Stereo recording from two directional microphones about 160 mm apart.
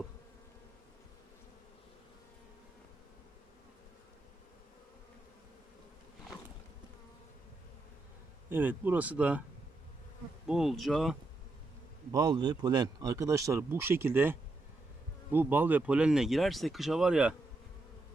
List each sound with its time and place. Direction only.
8.4 s speech: 10° right (ahead or behind)
10.4 s speech: centre (ahead or behind)
12.1 s speech: 25° right (ahead or behind); by 17.3 s 5° right (ahead or behind)